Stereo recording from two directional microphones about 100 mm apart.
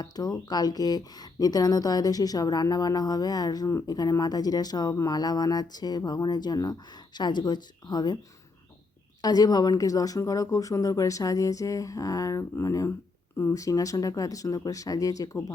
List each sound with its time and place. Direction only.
0.0 s speech: 40° left (ahead or behind)
9.2 s speech: 40° left (ahead or behind)